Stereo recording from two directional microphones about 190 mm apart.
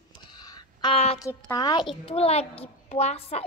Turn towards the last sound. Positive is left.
turn(degrees=35)  # may be behind; listen again after turning